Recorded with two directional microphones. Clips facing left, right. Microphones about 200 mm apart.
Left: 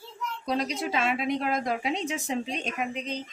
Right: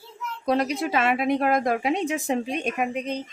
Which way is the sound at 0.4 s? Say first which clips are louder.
Right 6 dB; 60° right (ahead or behind).